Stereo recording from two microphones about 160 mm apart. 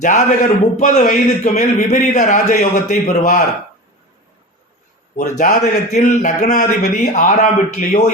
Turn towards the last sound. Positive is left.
turn(degrees=45)  # may be behind; listen again after turning